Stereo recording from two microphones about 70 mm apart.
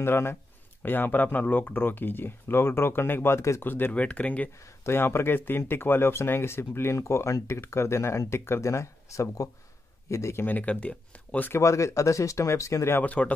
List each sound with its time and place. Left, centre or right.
0.0 s speech: left
3.9 s speech: centre
4.8 s speech: left
10.4 s speech: left
11.5 s speech: left
13.0 s speech: centre